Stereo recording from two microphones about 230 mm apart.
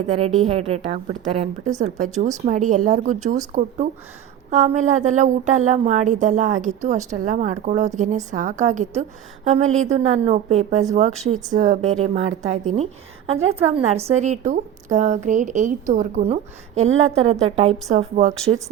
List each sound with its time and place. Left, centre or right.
0.4 s a woman's voice: right